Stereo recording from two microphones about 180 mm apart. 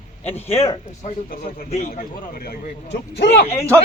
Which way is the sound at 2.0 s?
55° left (ahead or behind).